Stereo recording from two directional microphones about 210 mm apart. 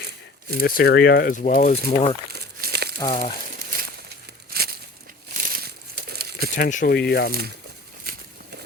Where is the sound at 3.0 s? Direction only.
25° left (ahead or behind).